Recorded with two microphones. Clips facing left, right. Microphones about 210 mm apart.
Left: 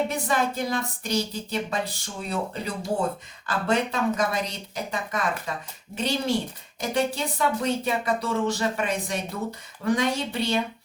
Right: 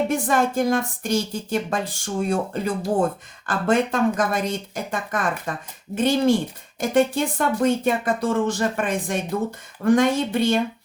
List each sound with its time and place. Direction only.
0.1 s speech: 50° right (ahead or behind)